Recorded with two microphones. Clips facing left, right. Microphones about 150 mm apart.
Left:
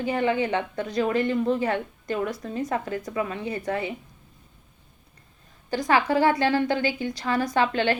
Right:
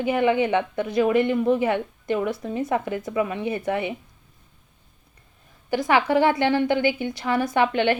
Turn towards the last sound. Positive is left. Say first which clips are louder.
# right 2 dB
turn(degrees=-20)  # may be behind; listen again after turning